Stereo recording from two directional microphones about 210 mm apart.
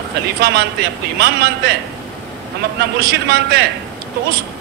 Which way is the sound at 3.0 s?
50° right (ahead or behind).